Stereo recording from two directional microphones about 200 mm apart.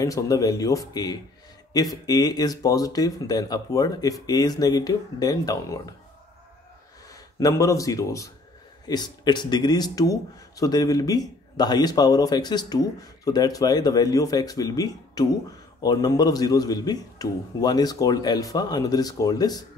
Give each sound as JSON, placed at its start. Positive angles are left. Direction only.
{"t": 0.0, "sound": "speech", "side_deg": 15}
{"t": 7.3, "sound": "speech", "side_deg": 15}